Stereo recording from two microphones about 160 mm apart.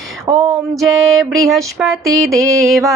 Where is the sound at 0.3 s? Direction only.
20° right (ahead or behind).